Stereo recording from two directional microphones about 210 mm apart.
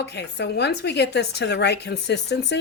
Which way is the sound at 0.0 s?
55° left (ahead or behind).